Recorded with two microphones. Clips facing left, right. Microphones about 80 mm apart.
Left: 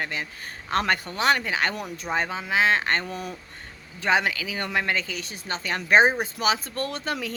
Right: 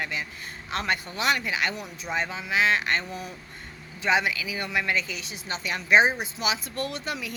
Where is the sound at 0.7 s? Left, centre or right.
Left.